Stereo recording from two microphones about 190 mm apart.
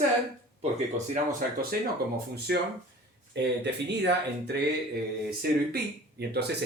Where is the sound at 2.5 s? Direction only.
60° right (ahead or behind).